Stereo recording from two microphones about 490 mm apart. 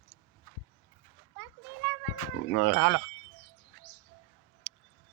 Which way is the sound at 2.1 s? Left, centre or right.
Left.